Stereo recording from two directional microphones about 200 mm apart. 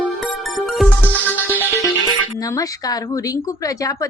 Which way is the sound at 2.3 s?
15° left (ahead or behind).